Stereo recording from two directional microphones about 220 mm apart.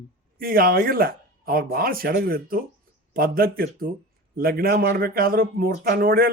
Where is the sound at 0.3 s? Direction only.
40° right (ahead or behind).